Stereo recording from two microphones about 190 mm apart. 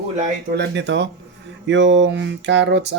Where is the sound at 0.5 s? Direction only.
65° right (ahead or behind).